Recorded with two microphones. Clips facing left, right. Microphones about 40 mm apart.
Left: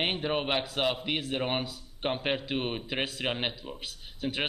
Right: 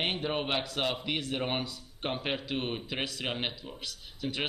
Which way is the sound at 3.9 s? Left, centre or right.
Left.